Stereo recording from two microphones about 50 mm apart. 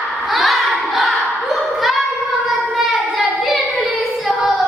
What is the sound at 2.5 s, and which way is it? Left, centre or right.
Child singing, centre.